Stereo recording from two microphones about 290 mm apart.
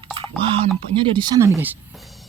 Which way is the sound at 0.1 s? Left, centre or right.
Centre.